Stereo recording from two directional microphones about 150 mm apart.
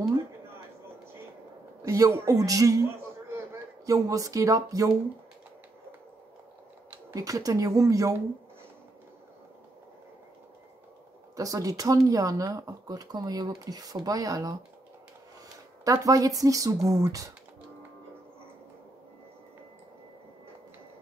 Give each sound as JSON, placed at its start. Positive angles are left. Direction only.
{"t": 1.8, "sound": "speech", "side_deg": -20}
{"t": 3.8, "sound": "speech", "side_deg": -20}
{"t": 7.1, "sound": "speech", "side_deg": -20}
{"t": 11.3, "sound": "speech", "side_deg": -25}
{"t": 15.8, "sound": "speech", "side_deg": -20}